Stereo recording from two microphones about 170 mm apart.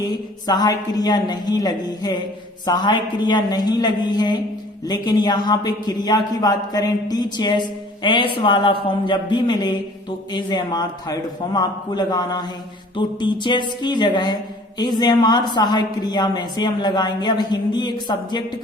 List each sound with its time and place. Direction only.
0.4 s a woman's voice: 25° left (ahead or behind)